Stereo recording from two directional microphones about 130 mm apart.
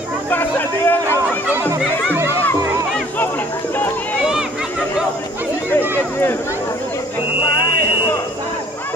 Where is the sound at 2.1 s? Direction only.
20° right (ahead or behind).